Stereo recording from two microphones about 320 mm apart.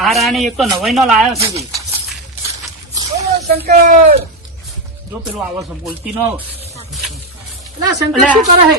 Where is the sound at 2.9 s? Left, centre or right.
Centre.